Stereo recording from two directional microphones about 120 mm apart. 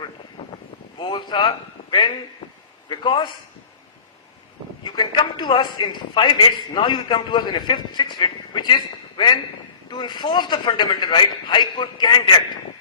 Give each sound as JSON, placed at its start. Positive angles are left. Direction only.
{"t": 0.9, "sound": "a man's voice", "side_deg": 40}
{"t": 4.8, "sound": "a man's voice", "side_deg": 35}